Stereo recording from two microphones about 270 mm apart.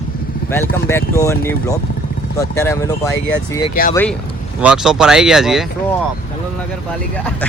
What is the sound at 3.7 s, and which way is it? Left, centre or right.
Speech, left.